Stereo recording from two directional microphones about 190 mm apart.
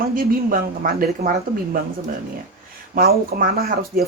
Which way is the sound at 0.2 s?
45° right (ahead or behind).